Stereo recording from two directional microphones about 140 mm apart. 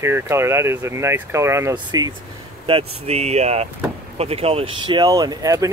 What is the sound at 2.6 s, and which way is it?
Speech, 45° right (ahead or behind).